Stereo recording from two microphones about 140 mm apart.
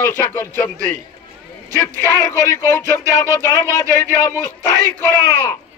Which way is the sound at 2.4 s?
20° left (ahead or behind).